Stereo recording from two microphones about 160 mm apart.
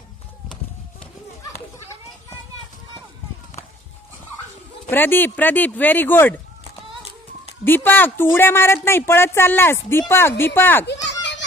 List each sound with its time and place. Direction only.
4.8 s speech: 15° left (ahead or behind)
7.6 s speech: 15° left (ahead or behind)
11.1 s children playing: 90° left